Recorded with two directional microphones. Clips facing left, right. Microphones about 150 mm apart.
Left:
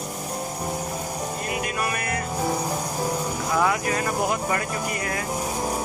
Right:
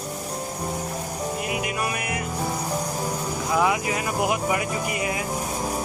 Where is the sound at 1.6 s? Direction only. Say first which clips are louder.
Even; 15° right (ahead or behind).